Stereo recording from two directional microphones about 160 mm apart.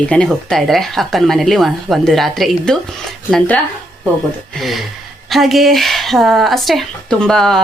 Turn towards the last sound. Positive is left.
turn(degrees=5)  # may be behind; listen again after turning